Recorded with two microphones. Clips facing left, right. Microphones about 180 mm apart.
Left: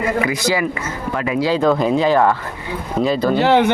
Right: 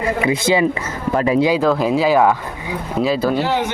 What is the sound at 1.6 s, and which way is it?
Speech, 5° right (ahead or behind).